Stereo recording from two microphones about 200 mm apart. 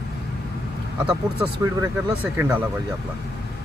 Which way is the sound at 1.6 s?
10° right (ahead or behind).